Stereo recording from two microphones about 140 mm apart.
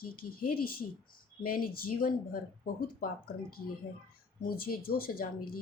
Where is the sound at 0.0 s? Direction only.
90° left.